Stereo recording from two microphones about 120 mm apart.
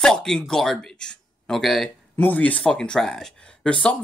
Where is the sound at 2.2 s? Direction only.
15° left (ahead or behind).